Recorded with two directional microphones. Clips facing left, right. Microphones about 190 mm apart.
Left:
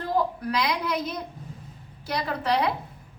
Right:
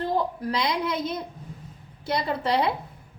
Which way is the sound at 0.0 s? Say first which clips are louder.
Even; 25° right (ahead or behind).